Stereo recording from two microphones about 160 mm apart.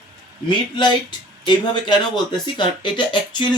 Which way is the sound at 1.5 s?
30° left (ahead or behind).